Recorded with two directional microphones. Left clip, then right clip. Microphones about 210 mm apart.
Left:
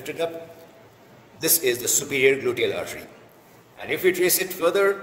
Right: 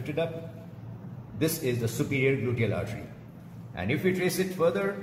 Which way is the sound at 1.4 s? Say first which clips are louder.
Left 5 dB; 55° left (ahead or behind).